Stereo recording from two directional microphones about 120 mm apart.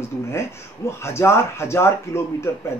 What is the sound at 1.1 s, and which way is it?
Speech, 20° left (ahead or behind).